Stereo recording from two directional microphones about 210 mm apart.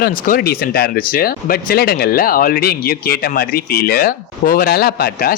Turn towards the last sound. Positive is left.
turn(degrees=45)  # may be behind; listen again after turning